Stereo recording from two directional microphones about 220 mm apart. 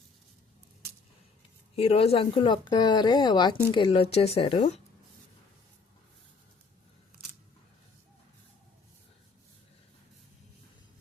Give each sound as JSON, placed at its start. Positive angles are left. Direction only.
{"t": 1.7, "sound": "speech", "side_deg": 25}